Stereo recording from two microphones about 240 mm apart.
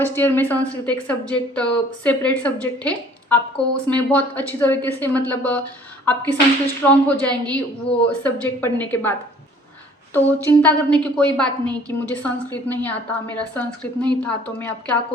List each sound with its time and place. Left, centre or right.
0.0 s a woman's voice: centre
6.8 s a woman's voice: centre